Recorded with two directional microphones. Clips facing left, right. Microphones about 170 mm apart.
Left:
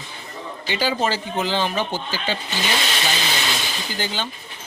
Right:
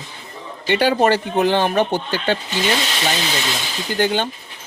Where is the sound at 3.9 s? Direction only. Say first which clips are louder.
Right 10 dB; 55° right (ahead or behind).